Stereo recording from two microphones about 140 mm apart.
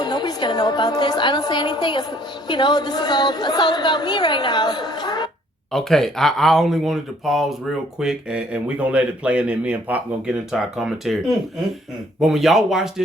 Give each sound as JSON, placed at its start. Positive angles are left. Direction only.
{"t": 0.0, "sound": "a woman's voice", "side_deg": 30}
{"t": 5.7, "sound": "speech", "side_deg": 5}
{"t": 12.2, "sound": "speech", "side_deg": 0}